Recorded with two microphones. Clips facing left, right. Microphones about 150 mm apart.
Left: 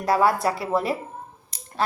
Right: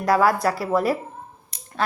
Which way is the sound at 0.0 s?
25° left (ahead or behind).